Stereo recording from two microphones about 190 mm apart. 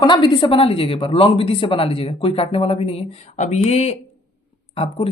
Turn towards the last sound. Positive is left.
turn(degrees=30)  # may be behind; listen again after turning